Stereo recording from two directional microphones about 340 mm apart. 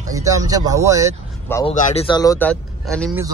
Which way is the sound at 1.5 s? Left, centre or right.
Centre.